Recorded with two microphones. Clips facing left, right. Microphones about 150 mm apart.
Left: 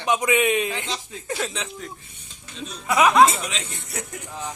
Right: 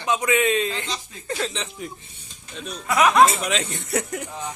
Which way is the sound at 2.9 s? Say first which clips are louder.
Left 1 dB; 5° left (ahead or behind).